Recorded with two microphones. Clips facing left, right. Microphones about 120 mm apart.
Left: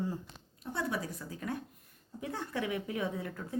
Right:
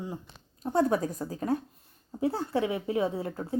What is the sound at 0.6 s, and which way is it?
A woman's voice, 45° right (ahead or behind).